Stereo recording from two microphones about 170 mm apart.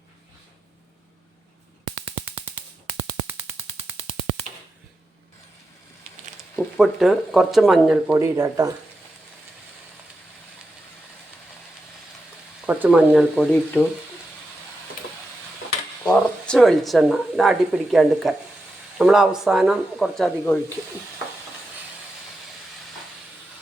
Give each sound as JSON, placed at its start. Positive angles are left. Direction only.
{"t": 6.6, "sound": "speech", "side_deg": 0}
{"t": 8.1, "sound": "speech", "side_deg": -20}
{"t": 12.6, "sound": "speech", "side_deg": -10}
{"t": 13.3, "sound": "speech", "side_deg": 5}
{"t": 16.1, "sound": "speech", "side_deg": 0}